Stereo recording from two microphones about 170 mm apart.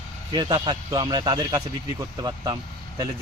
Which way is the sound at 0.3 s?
25° right (ahead or behind).